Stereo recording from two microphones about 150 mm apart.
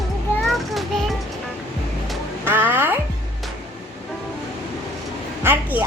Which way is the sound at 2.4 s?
15° right (ahead or behind).